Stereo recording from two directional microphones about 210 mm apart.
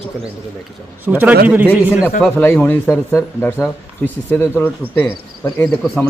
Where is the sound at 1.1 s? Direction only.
5° right (ahead or behind).